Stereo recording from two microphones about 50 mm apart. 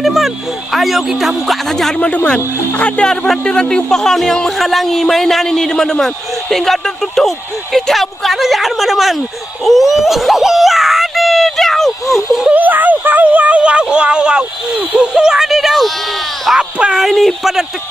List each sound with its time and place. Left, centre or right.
0.0 s speech: centre
2.0 s speech: left
3.4 s speech: centre
9.7 s a sound: centre
12.5 s speech: right; by 17.6 s centre